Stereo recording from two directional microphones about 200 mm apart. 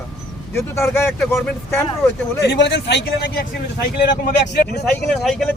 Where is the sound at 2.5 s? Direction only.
55° left (ahead or behind).